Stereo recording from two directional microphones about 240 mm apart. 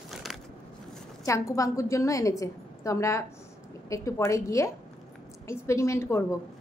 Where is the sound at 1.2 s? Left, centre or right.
Centre.